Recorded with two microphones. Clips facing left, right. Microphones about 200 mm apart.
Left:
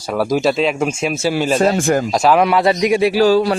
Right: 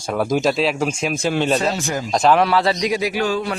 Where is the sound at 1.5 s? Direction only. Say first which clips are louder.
Left 7 dB; 50° left (ahead or behind).